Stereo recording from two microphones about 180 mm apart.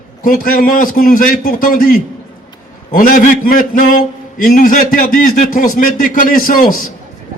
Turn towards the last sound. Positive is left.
turn(degrees=50)  # may be behind; listen again after turning